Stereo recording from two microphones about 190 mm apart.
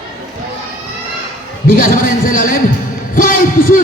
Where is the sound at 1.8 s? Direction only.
45° left (ahead or behind).